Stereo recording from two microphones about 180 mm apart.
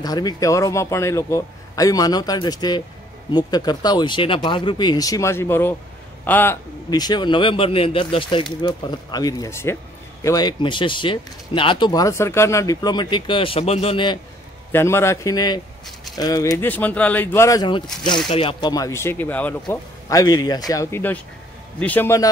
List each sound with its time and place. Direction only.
0.0 s speech: 20° left (ahead or behind)
14.7 s speech: 15° left (ahead or behind)